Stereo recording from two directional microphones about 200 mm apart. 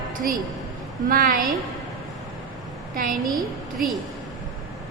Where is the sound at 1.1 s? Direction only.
45° right (ahead or behind).